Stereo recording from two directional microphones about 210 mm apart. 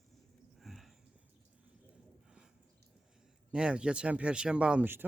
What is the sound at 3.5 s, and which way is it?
Speech, 5° right (ahead or behind).